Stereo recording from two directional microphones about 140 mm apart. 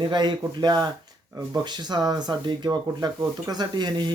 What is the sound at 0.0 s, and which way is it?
Speech, 30° right (ahead or behind).